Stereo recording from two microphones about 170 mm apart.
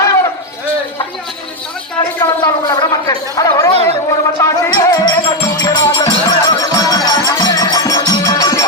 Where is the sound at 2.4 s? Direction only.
25° left (ahead or behind).